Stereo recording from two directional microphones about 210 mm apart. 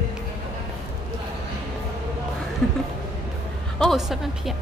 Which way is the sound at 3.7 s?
Centre (ahead or behind).